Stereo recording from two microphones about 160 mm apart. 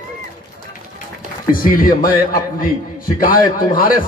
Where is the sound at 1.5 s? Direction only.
60° left (ahead or behind).